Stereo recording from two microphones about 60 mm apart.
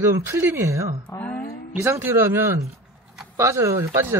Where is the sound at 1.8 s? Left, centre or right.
Right.